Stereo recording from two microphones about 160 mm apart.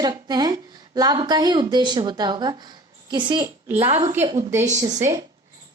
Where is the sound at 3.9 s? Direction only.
20° right (ahead or behind).